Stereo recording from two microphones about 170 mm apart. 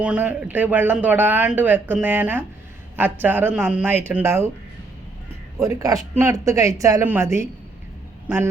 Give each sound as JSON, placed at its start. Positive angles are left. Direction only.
{"t": 0.0, "sound": "speech", "side_deg": -10}
{"t": 5.6, "sound": "speech", "side_deg": -20}